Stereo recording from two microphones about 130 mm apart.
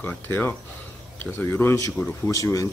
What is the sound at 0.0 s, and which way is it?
Speech, 15° left (ahead or behind).